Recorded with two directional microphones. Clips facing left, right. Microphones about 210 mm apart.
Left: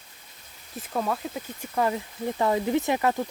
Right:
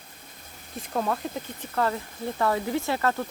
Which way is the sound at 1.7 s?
15° left (ahead or behind).